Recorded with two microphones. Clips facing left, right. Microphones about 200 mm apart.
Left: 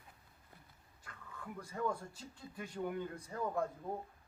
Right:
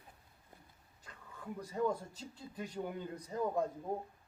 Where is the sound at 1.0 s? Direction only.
20° right (ahead or behind).